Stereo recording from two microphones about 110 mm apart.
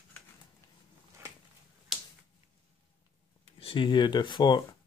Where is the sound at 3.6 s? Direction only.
50° left (ahead or behind).